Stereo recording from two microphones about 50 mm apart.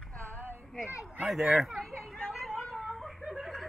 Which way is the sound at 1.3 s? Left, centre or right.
Centre.